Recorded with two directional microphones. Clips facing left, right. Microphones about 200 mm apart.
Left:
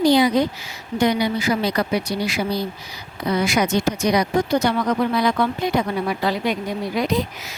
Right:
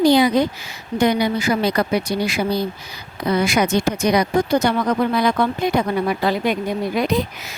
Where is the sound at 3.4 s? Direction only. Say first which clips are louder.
Right 1 dB; 55° right (ahead or behind).